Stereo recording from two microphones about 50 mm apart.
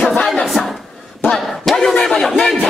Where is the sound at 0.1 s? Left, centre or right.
Centre.